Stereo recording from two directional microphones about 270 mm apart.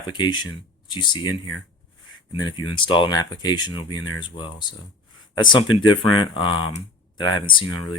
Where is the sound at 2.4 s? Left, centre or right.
Centre.